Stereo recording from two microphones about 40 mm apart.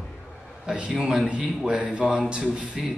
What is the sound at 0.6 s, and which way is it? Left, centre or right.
Speech, centre.